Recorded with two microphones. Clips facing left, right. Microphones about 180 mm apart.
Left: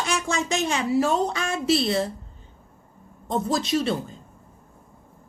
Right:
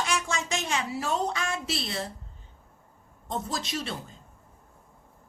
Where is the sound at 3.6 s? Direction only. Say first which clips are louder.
Left 10 dB; 30° left (ahead or behind).